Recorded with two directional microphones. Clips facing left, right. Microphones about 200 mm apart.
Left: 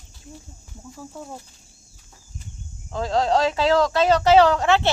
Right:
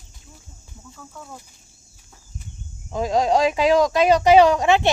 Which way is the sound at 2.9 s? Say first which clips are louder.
Right 2 dB; 15° right (ahead or behind).